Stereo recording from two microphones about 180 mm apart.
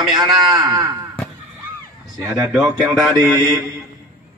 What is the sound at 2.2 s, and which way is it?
Speech, 15° right (ahead or behind).